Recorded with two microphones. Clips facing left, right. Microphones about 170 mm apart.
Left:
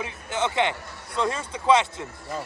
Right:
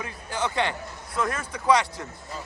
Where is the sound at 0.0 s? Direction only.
20° left (ahead or behind).